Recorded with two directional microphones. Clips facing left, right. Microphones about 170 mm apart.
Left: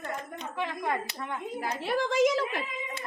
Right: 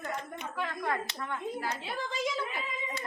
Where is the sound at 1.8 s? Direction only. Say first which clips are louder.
Left 10 dB; 85° left.